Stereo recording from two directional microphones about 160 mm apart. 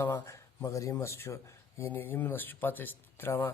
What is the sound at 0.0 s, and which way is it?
Speech, 15° left (ahead or behind).